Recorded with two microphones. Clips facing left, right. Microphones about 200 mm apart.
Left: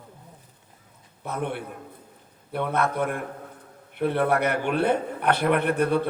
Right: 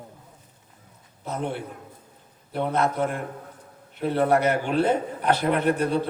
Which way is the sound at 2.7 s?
60° left (ahead or behind).